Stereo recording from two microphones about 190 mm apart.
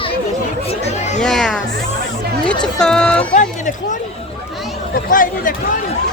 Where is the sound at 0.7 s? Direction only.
35° left (ahead or behind).